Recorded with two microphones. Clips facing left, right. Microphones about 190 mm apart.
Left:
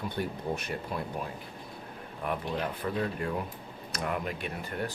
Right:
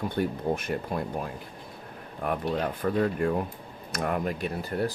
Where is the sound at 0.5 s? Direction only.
50° right (ahead or behind).